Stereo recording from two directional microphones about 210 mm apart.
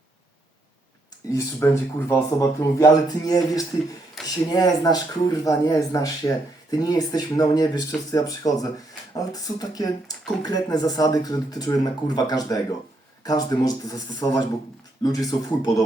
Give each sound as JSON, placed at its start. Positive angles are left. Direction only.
{"t": 1.3, "sound": "speech", "side_deg": 15}
{"t": 4.2, "sound": "a sound", "side_deg": 0}
{"t": 4.5, "sound": "speech", "side_deg": 20}